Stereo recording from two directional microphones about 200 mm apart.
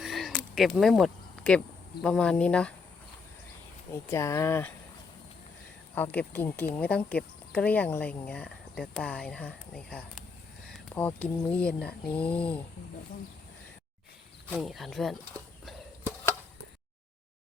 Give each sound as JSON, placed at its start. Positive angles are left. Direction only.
{"t": 0.0, "sound": "speech", "side_deg": 0}
{"t": 3.9, "sound": "speech", "side_deg": 15}
{"t": 5.9, "sound": "speech", "side_deg": 10}
{"t": 14.5, "sound": "speech", "side_deg": 0}